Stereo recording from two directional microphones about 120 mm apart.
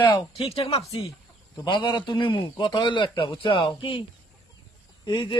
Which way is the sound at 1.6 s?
40° left (ahead or behind).